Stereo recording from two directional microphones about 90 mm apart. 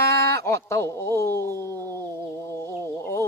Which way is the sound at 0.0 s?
35° left (ahead or behind).